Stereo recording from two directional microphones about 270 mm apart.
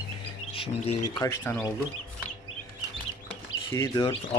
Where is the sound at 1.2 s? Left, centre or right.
Centre.